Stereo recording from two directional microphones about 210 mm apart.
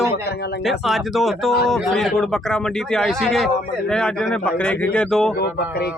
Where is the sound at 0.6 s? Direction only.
Centre (ahead or behind).